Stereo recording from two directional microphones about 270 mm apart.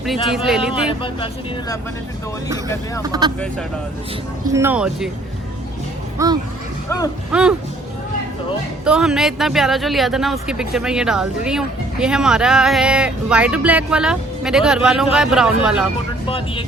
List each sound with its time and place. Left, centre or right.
0.0 s speech: centre
0.9 s speech: centre
3.0 s speech: centre
4.5 s speech: centre
6.1 s speech: centre
8.8 s speech: centre
16.2 s speech: centre